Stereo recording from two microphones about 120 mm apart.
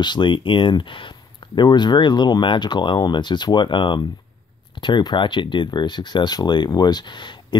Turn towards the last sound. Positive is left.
turn(degrees=40)  # may be behind; listen again after turning